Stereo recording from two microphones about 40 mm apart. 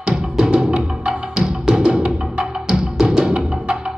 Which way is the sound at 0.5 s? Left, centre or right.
Right.